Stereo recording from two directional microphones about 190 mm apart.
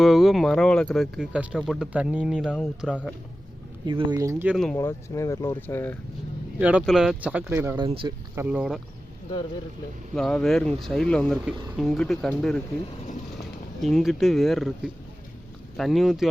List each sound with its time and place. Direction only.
0.0 s speech: centre (ahead or behind)
3.8 s speech: 25° right (ahead or behind)
4.5 s speech: centre (ahead or behind)
4.8 s speech: 15° left (ahead or behind)
6.6 s speech: 5° right (ahead or behind)
7.9 s speech: 30° right (ahead or behind)
8.4 s speech: 5° right (ahead or behind)
10.2 s speech: centre (ahead or behind)
15.8 s speech: centre (ahead or behind)